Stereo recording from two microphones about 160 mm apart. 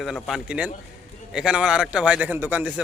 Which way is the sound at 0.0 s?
Centre (ahead or behind).